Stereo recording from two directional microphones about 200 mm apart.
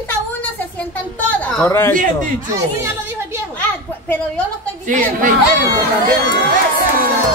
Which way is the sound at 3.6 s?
5° left (ahead or behind).